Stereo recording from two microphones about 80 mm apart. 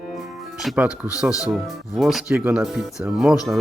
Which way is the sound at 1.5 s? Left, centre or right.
Centre.